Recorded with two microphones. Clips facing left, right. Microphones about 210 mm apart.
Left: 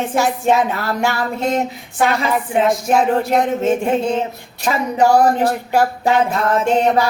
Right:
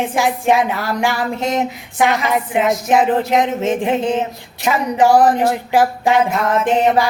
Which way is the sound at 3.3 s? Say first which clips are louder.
Left 1 dB; 15° right (ahead or behind).